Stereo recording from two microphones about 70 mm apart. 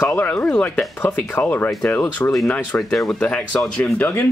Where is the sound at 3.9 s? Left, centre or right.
Left.